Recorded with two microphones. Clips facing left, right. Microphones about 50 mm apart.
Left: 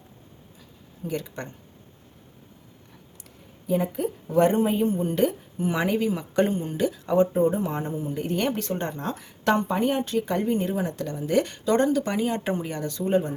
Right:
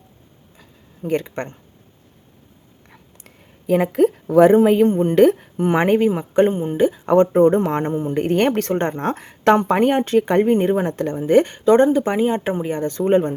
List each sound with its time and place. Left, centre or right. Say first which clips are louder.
0.5 s a sound: right 2 dB; right
3.2 s a sound: right 7 dB; right
4.6 s a woman's voice: right 9 dB; right
6.1 s speech: right 7 dB; right
7.1 s speech: right 7 dB; right
12.9 s speech: right 7 dB; right